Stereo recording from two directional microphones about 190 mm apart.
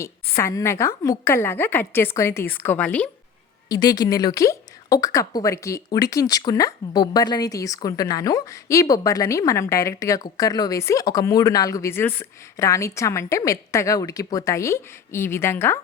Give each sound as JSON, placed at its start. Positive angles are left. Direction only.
{"t": 0.3, "sound": "a woman's voice", "side_deg": 15}
{"t": 3.7, "sound": "a woman's voice", "side_deg": 20}